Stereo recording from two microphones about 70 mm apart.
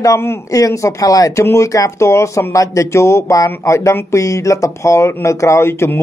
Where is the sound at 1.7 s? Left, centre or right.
Left.